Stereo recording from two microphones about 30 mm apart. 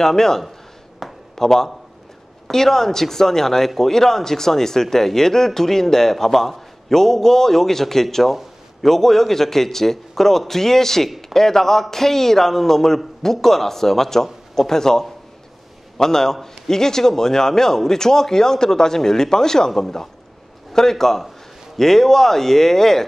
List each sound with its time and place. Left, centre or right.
0.0 s speech: centre
1.0 s a sound: centre
2.5 s speech: centre